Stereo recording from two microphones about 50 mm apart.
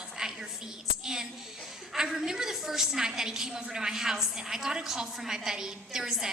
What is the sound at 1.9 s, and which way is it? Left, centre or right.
A woman's voice, centre.